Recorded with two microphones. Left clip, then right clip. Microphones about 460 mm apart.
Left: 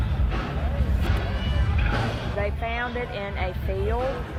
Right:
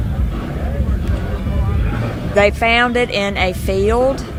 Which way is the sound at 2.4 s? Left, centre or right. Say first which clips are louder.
Right 17 dB; right.